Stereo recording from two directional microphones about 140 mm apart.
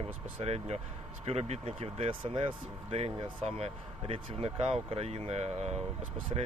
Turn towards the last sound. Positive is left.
turn(degrees=-40)  # may be behind; listen again after turning